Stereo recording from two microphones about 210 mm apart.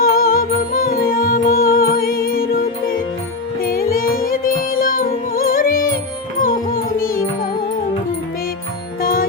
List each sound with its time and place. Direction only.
0.0 s music: 45° left (ahead or behind)
9.0 s music: 45° left (ahead or behind)